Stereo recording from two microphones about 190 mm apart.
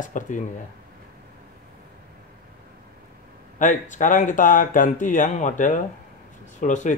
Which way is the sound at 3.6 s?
40° left (ahead or behind).